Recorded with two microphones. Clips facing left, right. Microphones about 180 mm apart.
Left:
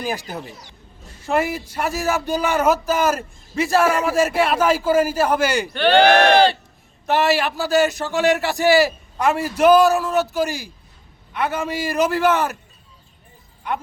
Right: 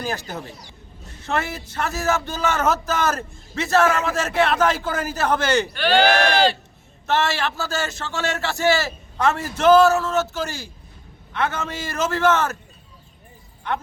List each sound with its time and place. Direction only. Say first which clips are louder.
0.0 s speech: left 2 dB; 15° left (ahead or behind)
5.8 s speech: left 6 dB; 60° left (ahead or behind)
7.1 s speech: left 4 dB; 15° left (ahead or behind)